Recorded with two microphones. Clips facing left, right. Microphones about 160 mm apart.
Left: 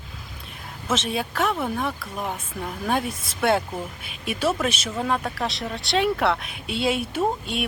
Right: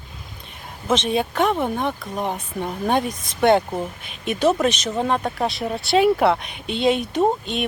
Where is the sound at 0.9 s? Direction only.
Centre (ahead or behind).